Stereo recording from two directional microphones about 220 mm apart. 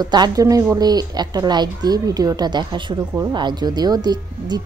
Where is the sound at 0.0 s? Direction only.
20° right (ahead or behind).